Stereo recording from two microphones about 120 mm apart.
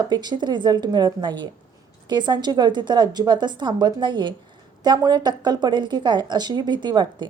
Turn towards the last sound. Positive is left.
turn(degrees=-35)  # may be behind; listen again after turning